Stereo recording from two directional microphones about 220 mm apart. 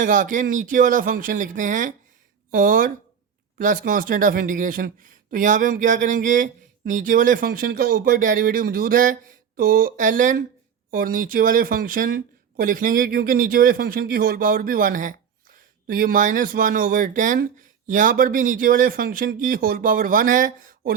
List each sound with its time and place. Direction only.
0.0 s speech: 35° right (ahead or behind)